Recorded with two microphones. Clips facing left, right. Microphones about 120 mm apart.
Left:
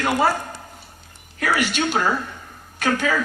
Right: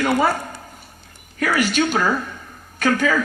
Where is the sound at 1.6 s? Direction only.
45° right (ahead or behind).